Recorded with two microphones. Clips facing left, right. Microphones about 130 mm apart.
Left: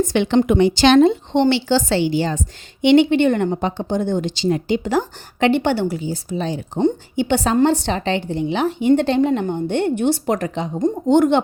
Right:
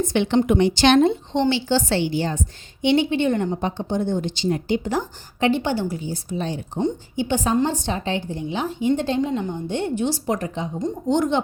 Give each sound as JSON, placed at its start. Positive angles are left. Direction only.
{"t": 0.0, "sound": "speech", "side_deg": 90}
{"t": 2.8, "sound": "a woman's voice", "side_deg": 75}
{"t": 10.8, "sound": "a woman's voice", "side_deg": 55}